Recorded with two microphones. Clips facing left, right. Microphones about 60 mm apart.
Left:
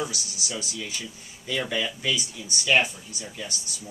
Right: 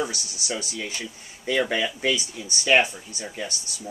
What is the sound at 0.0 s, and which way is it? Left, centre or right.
Speech, right.